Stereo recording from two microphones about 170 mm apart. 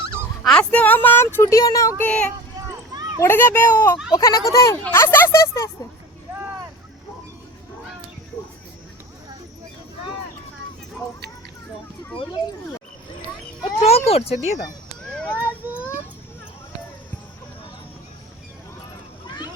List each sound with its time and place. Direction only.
0.4 s speech: 5° left (ahead or behind)
2.0 s speech: 10° left (ahead or behind)
13.8 s speech: 35° left (ahead or behind)
15.1 s a sound: 5° left (ahead or behind)
15.6 s child singing: 10° right (ahead or behind)